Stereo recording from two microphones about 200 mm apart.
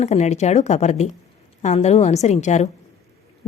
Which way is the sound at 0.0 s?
35° left (ahead or behind).